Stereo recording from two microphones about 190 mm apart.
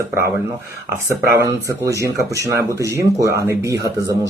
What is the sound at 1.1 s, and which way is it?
Speech, 15° right (ahead or behind).